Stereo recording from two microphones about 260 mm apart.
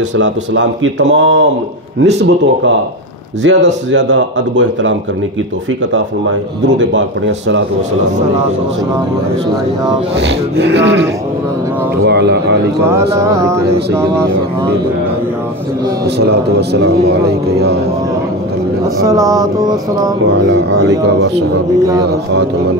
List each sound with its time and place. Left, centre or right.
0.2 s a man's voice: right
6.8 s speech: right
10.2 s speech: right
12.1 s a man's voice: right
12.9 s a sound: centre
16.2 s a man's voice: right
19.0 s a sound: centre
21.0 s a man's voice: right